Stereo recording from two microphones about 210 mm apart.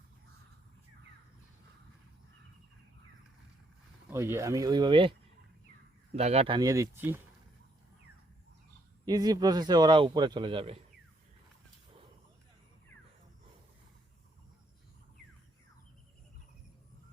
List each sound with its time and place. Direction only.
4.1 s speech: 15° right (ahead or behind)
6.1 s speech: 30° right (ahead or behind); by 7.2 s 10° right (ahead or behind)
9.0 s a man's voice: 20° right (ahead or behind)